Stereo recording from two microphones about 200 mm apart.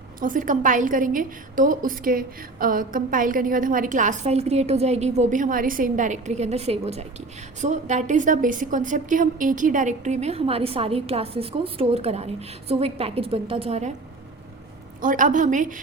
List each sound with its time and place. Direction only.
0.2 s a woman's voice: 40° right (ahead or behind)
15.0 s a woman's voice: 40° right (ahead or behind)